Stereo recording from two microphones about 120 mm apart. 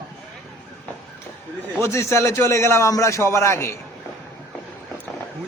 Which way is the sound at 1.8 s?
25° left (ahead or behind).